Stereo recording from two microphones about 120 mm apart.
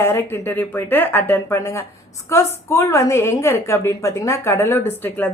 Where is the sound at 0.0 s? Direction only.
20° left (ahead or behind).